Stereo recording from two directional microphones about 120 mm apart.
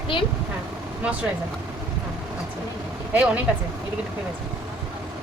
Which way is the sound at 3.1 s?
10° right (ahead or behind).